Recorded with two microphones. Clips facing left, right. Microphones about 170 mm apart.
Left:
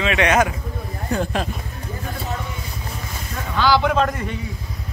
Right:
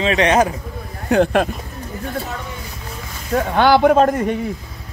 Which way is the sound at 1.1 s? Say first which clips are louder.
Right 8 dB; 65° right (ahead or behind).